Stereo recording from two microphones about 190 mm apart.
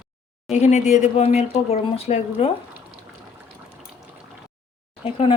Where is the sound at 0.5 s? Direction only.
40° left (ahead or behind).